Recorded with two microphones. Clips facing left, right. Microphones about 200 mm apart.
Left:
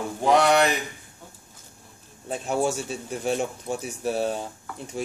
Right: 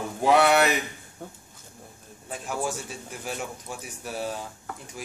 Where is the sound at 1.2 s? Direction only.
55° right (ahead or behind).